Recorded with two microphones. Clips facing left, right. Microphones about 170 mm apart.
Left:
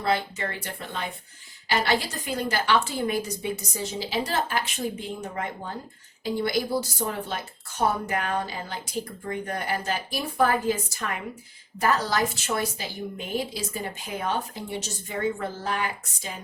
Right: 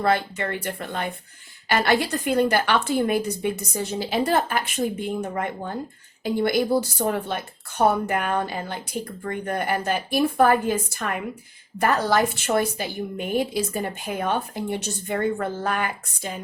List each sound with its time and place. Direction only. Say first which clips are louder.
0.0 s a woman's voice: right 4 dB; 55° right (ahead or behind)